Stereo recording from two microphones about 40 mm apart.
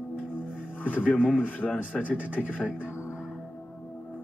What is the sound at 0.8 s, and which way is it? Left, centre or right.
Speech, left.